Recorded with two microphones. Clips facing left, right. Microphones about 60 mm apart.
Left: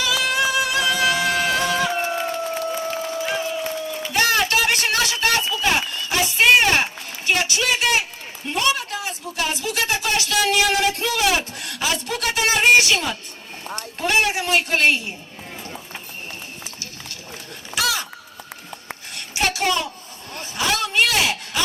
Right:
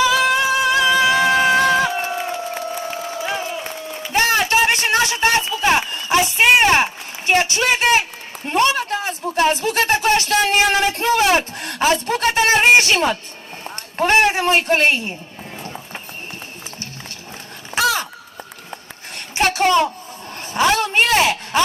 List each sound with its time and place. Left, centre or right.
0.0 s music: right
2.6 s crowd: right
4.0 s a sound: right
13.7 s a man's voice: right
17.7 s crow: right
18.7 s a sound: right
20.3 s speech: right